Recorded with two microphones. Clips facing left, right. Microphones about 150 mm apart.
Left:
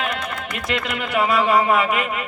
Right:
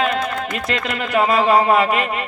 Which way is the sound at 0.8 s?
40° right (ahead or behind).